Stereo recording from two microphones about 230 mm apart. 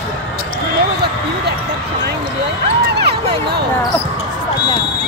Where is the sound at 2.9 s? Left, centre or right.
Right.